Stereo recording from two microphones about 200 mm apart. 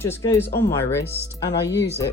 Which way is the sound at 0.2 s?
15° left (ahead or behind).